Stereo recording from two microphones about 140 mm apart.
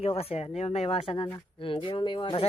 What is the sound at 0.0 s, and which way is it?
Speech, 45° left (ahead or behind).